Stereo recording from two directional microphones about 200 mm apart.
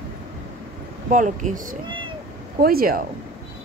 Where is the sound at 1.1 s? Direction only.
40° right (ahead or behind).